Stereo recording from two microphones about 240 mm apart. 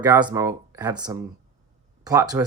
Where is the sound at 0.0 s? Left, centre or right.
Centre.